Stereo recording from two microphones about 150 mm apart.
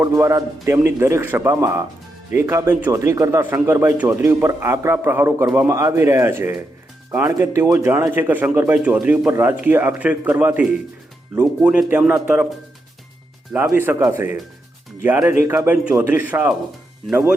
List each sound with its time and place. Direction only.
0.0 s a man's voice: 20° right (ahead or behind)
13.5 s speech: 15° right (ahead or behind)